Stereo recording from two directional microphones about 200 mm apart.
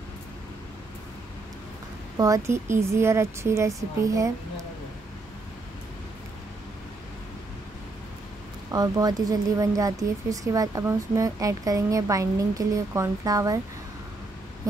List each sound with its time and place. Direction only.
2.1 s speech: 15° right (ahead or behind)
8.7 s speech: 20° right (ahead or behind)